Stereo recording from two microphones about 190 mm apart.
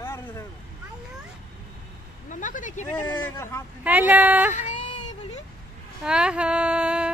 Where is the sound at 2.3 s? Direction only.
45° left (ahead or behind).